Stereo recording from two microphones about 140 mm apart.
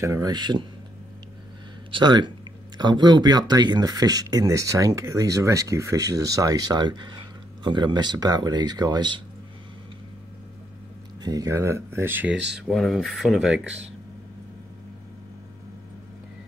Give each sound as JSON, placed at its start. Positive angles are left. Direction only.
{"t": 0.0, "sound": "speech", "side_deg": -25}
{"t": 1.9, "sound": "speech", "side_deg": -35}
{"t": 11.2, "sound": "speech", "side_deg": -25}